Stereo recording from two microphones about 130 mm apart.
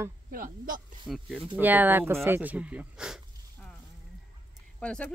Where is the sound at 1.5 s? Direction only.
15° right (ahead or behind).